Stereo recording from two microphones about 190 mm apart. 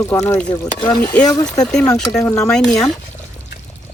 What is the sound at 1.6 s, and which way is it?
Speech, 5° left (ahead or behind).